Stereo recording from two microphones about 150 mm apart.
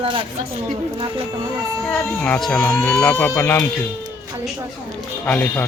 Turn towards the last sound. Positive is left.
turn(degrees=10)  # may be behind; listen again after turning